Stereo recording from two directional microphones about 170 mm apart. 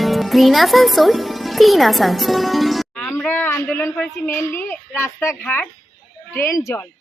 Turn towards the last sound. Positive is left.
turn(degrees=15)  # may be behind; listen again after turning